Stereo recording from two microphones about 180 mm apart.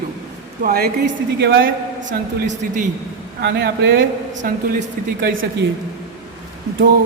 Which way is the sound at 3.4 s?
65° right (ahead or behind).